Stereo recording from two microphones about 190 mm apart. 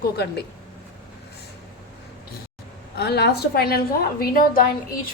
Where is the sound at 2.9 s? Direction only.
60° left (ahead or behind).